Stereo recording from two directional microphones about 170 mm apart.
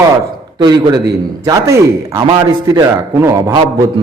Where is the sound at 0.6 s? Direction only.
25° right (ahead or behind).